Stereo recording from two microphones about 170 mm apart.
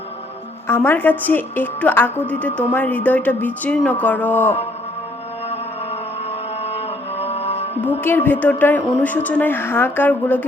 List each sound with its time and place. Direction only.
0.7 s a woman's voice: 15° left (ahead or behind)
7.2 s music: 40° left (ahead or behind)
8.0 s a woman's voice: 10° left (ahead or behind)